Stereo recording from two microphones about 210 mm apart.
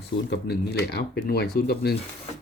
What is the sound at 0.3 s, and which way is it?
Speech, 50° left (ahead or behind).